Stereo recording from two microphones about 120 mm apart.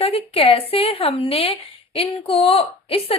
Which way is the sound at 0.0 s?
55° left (ahead or behind).